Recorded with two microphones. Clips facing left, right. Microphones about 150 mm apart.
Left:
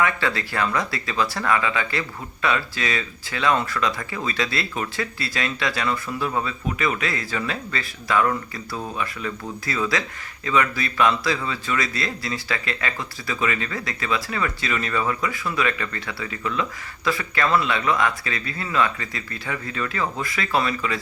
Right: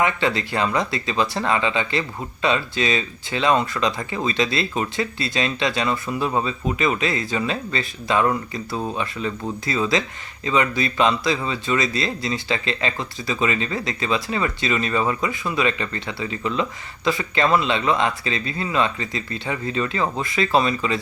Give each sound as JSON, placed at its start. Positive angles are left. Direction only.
{"t": 0.0, "sound": "speech", "side_deg": -20}